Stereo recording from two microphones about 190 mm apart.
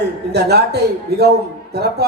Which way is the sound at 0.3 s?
60° right (ahead or behind).